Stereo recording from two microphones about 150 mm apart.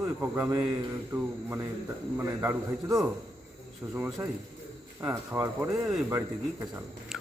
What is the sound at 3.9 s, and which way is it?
Speech, 10° right (ahead or behind).